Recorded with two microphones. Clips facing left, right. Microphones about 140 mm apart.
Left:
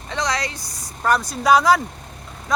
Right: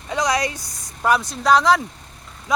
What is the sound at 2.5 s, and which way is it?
Speech, 10° right (ahead or behind).